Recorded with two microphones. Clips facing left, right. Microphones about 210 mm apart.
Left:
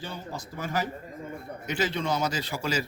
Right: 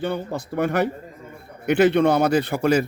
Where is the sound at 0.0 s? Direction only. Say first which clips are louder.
Right 11 dB; 60° right (ahead or behind).